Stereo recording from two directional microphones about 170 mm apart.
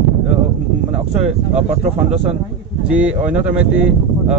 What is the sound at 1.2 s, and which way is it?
Speech, 40° right (ahead or behind).